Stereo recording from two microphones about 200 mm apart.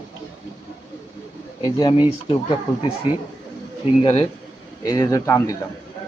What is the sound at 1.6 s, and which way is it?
Speech, 20° left (ahead or behind).